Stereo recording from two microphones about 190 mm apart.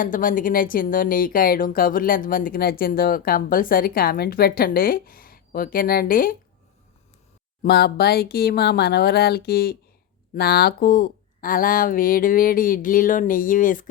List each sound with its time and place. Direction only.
0.0 s speech: 45° left (ahead or behind)
7.6 s speech: 55° left (ahead or behind)